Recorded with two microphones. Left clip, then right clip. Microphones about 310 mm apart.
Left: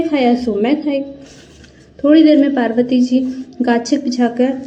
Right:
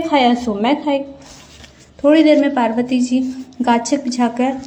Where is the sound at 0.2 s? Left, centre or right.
Right.